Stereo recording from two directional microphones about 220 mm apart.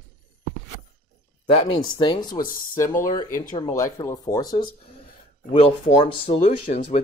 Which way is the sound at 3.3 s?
35° left (ahead or behind).